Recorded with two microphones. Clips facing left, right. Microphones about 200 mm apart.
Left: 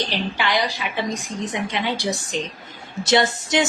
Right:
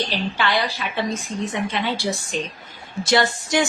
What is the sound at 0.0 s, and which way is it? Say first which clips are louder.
A woman's voice: right 1 dB; 15° left (ahead or behind).